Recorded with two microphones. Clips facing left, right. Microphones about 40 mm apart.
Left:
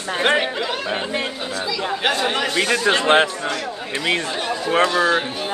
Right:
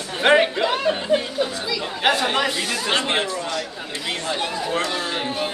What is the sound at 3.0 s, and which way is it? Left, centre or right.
Speech, left.